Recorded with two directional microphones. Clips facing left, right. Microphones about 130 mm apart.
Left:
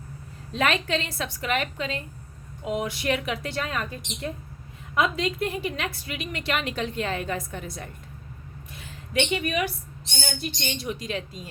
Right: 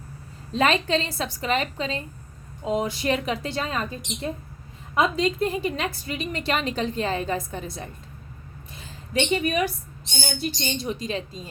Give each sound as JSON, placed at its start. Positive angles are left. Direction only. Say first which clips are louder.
{"t": 0.5, "sound": "a woman's voice", "louder": "right 3 dB", "side_deg": -30}
{"t": 8.7, "sound": "a sound", "louder": "right 1 dB", "side_deg": -30}
{"t": 10.6, "sound": "a woman's voice", "louder": "right 3 dB", "side_deg": -30}